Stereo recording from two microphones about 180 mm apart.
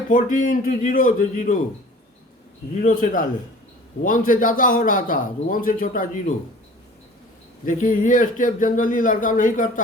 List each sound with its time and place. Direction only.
0.1 s a man's voice: 50° left (ahead or behind)
2.8 s a man's voice: 50° left (ahead or behind)
7.6 s a man's voice: 45° left (ahead or behind)